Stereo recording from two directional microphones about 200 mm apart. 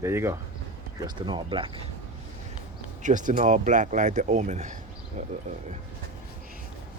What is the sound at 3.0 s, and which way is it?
Speech, 40° right (ahead or behind).